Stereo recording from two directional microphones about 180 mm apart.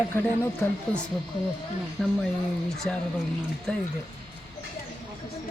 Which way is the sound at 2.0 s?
Centre (ahead or behind).